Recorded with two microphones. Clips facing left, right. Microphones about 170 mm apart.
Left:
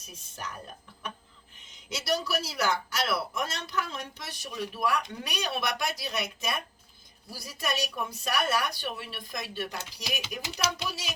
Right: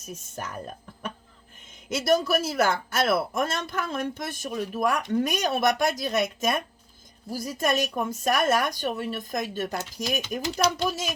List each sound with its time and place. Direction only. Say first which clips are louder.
0.0 s speech: right 5 dB; 50° right (ahead or behind)
1.6 s speech: right 8 dB; 50° right (ahead or behind)